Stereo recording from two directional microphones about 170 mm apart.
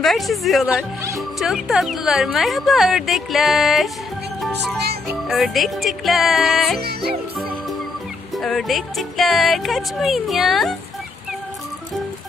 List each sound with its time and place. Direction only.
0.0 s a woman's voice: centre (ahead or behind)
4.4 s music: centre (ahead or behind)
5.3 s a woman's voice: centre (ahead or behind)
6.7 s music: 65° right (ahead or behind)
8.4 s a woman's voice: centre (ahead or behind)